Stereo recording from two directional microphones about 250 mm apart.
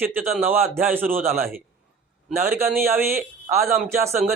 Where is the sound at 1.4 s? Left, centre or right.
Right.